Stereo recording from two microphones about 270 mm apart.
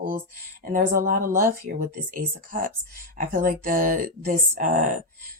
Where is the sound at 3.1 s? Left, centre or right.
Right.